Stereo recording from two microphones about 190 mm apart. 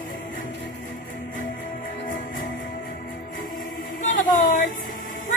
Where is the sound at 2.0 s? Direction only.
45° left (ahead or behind).